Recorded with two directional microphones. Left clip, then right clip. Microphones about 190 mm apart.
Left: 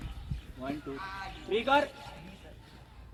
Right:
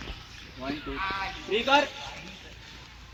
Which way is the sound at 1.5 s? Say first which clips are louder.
Right 4 dB; 25° right (ahead or behind).